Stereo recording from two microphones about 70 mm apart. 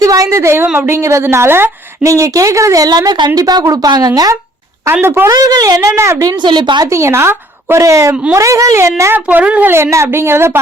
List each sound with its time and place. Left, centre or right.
0.0 s a woman's voice: right
2.0 s speech: right
4.9 s a woman's voice: right
5.3 s a woman's voice: right
5.9 s speech: right
6.3 s a woman's voice: right
6.8 s speech: right
9.1 s speech: right
9.6 s a woman's voice: right